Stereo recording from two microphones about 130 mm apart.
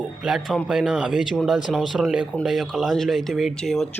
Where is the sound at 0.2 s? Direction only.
5° right (ahead or behind).